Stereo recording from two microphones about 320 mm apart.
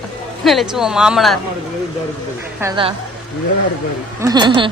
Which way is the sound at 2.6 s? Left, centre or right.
Centre.